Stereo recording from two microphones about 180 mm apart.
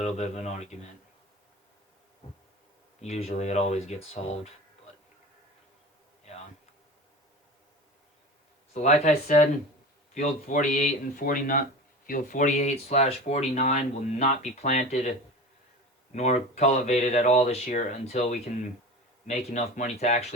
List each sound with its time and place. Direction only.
0.0 s speech: 40° left (ahead or behind)
3.0 s speech: 35° left (ahead or behind)
6.3 s a sound: 40° left (ahead or behind)
8.7 s speech: 40° left (ahead or behind)
16.1 s speech: 40° left (ahead or behind)